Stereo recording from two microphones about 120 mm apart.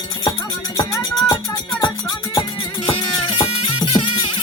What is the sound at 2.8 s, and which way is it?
Music, 50° left (ahead or behind).